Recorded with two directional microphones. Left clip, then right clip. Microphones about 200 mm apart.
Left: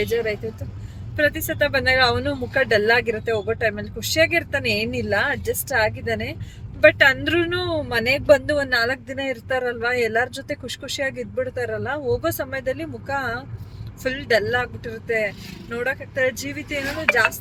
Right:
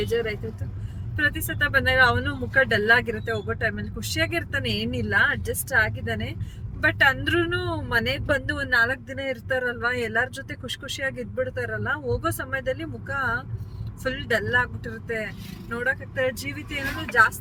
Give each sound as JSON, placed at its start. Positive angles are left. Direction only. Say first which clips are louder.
{"t": 1.1, "sound": "speech", "louder": "left 4 dB", "side_deg": 5}
{"t": 17.1, "sound": "speech", "louder": "left 1 dB", "side_deg": 50}